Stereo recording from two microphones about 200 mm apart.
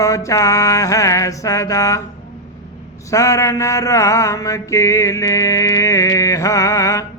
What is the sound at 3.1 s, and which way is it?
Mantra, 15° left (ahead or behind).